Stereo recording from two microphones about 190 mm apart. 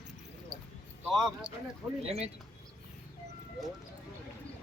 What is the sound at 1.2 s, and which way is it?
Speech, centre (ahead or behind).